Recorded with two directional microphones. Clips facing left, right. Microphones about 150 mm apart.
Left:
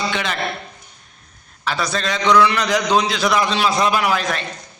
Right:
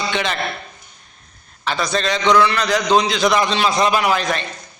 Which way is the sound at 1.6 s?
5° left (ahead or behind).